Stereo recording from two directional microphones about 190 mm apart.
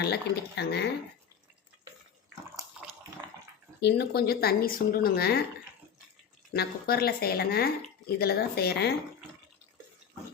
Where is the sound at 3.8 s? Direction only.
60° left (ahead or behind).